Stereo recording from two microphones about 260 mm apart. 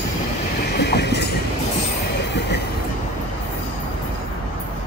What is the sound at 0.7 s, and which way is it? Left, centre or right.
Train, left.